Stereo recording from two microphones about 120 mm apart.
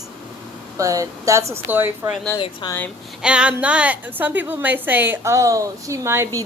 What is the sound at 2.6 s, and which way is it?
Speech, 40° left (ahead or behind).